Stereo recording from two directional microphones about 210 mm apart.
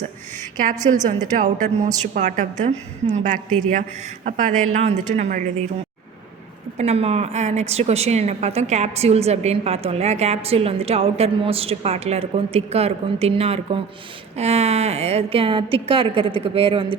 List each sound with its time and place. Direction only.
0.5 s a woman's voice: 40° right (ahead or behind)
6.7 s a woman's voice: 30° right (ahead or behind)